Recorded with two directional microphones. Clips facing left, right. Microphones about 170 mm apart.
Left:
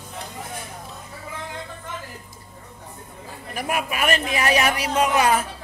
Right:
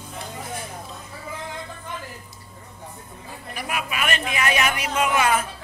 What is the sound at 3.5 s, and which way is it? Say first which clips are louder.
A man's voice: left 3 dB; 45° left (ahead or behind).